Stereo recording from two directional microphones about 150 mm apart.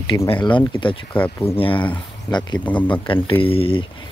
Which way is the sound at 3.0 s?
35° left (ahead or behind).